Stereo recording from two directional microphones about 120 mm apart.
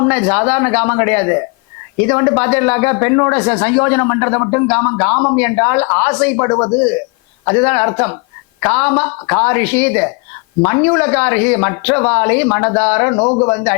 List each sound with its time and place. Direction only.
0.0 s speech: 20° left (ahead or behind)